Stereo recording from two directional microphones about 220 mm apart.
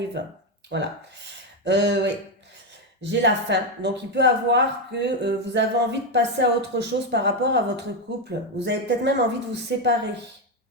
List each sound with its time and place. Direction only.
0.7 s speech: 55° right (ahead or behind)